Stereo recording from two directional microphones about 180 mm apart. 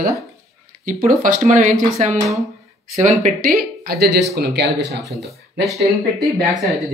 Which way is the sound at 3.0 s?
50° right (ahead or behind).